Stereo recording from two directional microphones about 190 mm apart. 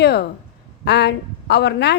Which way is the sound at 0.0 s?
60° left (ahead or behind).